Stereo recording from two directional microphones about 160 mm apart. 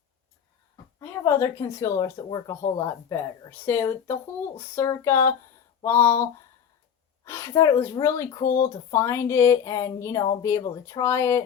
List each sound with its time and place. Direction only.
0.9 s speech: 20° left (ahead or behind)
7.3 s speech: 20° left (ahead or behind)